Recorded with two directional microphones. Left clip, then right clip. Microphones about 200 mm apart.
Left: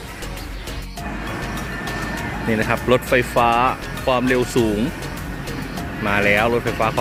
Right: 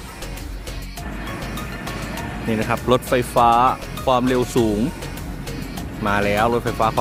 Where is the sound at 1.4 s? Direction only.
Centre (ahead or behind).